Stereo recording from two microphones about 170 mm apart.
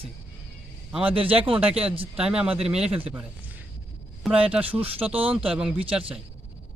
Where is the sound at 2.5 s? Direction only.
35° right (ahead or behind).